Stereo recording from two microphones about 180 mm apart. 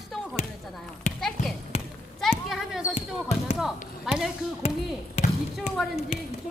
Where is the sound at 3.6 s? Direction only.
Centre (ahead or behind).